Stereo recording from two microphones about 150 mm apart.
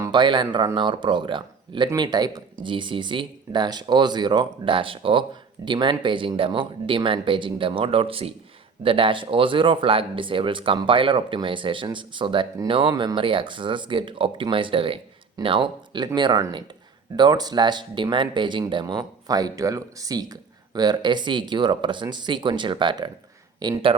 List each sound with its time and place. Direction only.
0.0 s speech: 30° right (ahead or behind)